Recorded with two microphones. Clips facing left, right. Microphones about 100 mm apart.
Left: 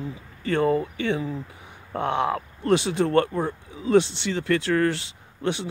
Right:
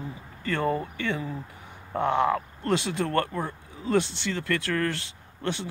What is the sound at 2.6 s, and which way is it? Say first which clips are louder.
Speech: left 6 dB; 20° left (ahead or behind).